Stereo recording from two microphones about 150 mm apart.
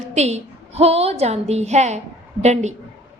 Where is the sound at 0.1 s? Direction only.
45° right (ahead or behind).